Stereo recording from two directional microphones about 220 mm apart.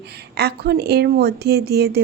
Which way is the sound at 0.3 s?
45° right (ahead or behind).